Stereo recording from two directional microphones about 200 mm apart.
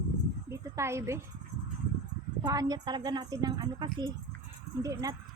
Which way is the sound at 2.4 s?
20° right (ahead or behind).